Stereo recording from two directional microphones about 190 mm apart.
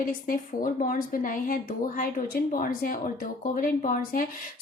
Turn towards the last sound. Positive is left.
turn(degrees=45)  # may be behind; listen again after turning